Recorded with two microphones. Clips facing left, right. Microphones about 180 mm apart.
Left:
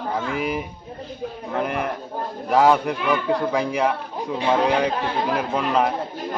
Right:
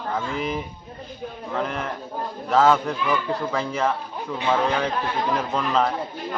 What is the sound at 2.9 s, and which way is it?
Speech, 60° left (ahead or behind).